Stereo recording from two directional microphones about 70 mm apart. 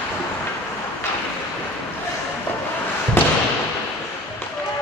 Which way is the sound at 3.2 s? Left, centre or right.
Left.